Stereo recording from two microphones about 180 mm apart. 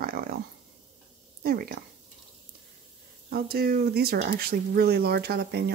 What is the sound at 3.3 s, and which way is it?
Speech, 55° right (ahead or behind).